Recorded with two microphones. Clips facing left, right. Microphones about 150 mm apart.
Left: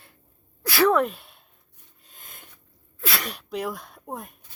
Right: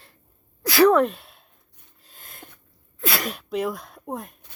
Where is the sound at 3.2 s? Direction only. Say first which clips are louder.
Right 5 dB; 5° right (ahead or behind).